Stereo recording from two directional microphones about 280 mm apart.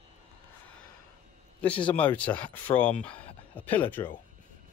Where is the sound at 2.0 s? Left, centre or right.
Centre.